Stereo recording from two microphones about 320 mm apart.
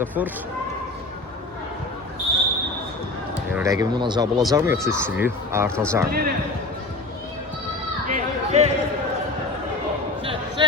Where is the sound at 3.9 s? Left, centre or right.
Centre.